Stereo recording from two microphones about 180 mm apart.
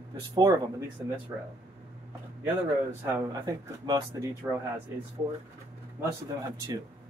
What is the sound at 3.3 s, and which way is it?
Speech, 20° right (ahead or behind).